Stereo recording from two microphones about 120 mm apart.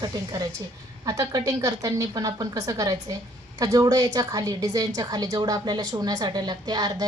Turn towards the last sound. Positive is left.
turn(degrees=-35)  # may be behind; listen again after turning